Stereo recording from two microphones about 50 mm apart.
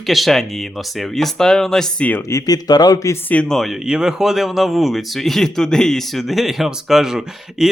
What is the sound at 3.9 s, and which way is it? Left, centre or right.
Speech, centre.